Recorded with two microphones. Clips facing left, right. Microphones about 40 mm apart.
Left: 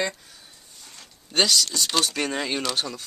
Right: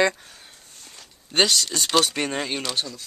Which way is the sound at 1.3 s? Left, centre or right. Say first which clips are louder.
Right 1 dB; right.